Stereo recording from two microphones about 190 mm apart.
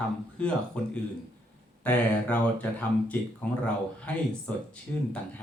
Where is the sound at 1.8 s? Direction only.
10° left (ahead or behind).